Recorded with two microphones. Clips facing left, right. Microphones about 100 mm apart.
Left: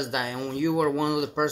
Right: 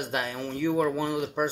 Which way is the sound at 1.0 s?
75° left (ahead or behind).